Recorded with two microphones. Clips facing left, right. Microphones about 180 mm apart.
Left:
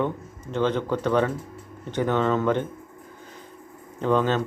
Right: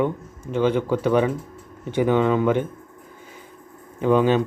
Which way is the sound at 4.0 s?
10° right (ahead or behind).